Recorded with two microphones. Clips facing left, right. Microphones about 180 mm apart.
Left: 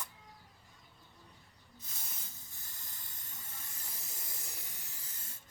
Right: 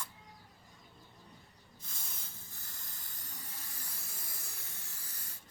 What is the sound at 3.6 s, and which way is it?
Hiss, 20° left (ahead or behind).